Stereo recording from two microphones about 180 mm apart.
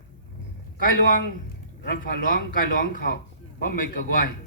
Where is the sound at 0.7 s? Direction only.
50° left (ahead or behind).